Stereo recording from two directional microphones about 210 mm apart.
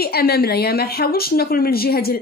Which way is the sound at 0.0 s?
50° left (ahead or behind).